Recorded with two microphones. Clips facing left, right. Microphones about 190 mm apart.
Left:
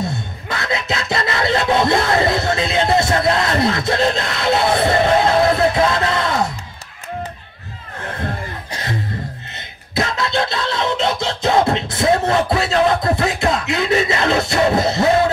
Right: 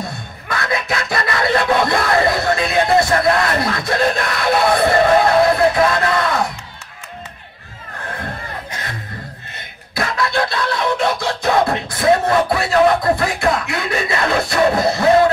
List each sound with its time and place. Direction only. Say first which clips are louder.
0.5 s music: right 1 dB; 25° left (ahead or behind)
5.8 s speech: right 1 dB; 25° left (ahead or behind)
9.9 s music: even; 25° left (ahead or behind)